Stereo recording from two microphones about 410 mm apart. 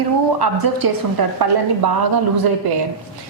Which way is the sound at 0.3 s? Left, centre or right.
Right.